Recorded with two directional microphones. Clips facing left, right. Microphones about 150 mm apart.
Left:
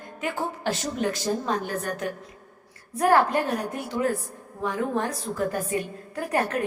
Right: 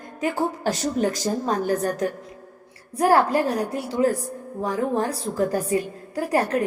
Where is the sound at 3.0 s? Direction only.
30° right (ahead or behind).